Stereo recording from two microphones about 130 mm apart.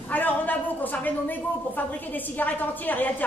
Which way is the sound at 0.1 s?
15° left (ahead or behind).